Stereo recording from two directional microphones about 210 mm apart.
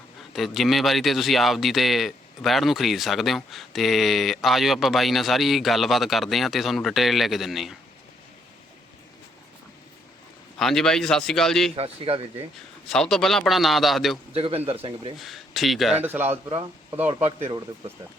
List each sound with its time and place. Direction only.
0.3 s a man's voice: centre (ahead or behind)
10.6 s a man's voice: centre (ahead or behind)
11.8 s speech: 25° right (ahead or behind)
12.9 s a man's voice: centre (ahead or behind)
14.3 s speech: 30° right (ahead or behind)
15.2 s speech: centre (ahead or behind)